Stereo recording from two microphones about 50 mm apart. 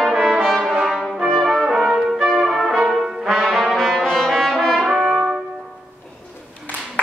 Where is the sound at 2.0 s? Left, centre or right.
Centre.